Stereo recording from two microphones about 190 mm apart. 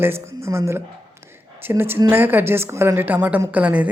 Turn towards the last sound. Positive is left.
turn(degrees=-10)  # may be behind; listen again after turning